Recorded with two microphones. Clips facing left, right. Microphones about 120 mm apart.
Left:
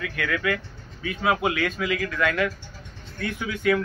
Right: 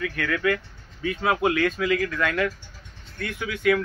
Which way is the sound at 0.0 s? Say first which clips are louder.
Right 2 dB; 10° left (ahead or behind).